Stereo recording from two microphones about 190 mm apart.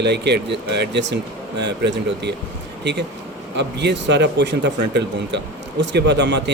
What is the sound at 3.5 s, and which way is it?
Speech, 65° right (ahead or behind).